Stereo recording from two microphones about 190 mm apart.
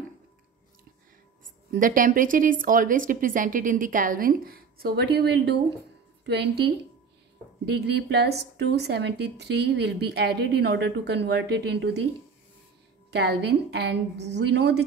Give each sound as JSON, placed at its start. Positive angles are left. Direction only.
{"t": 1.7, "sound": "speech", "side_deg": -45}
{"t": 13.1, "sound": "speech", "side_deg": -60}